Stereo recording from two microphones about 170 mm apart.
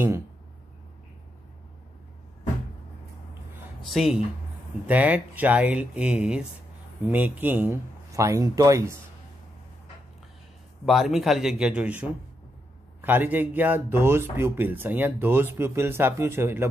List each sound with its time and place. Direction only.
3.8 s speech: centre (ahead or behind); by 8.9 s 20° right (ahead or behind)
10.9 s speech: centre (ahead or behind)